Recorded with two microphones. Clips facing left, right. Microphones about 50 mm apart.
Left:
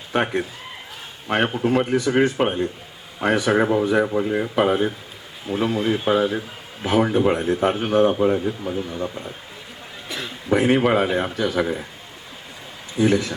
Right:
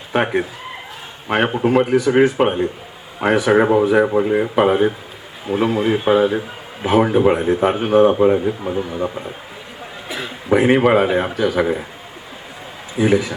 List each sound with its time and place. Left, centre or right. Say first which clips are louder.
0.1 s speech: right 4 dB; centre
3.6 s speech: right 5 dB; centre
10.1 s speech: right 4 dB; centre
13.0 s speech: right 3 dB; centre